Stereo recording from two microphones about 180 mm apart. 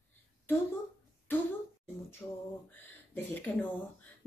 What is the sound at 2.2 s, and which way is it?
A woman's voice, 15° left (ahead or behind).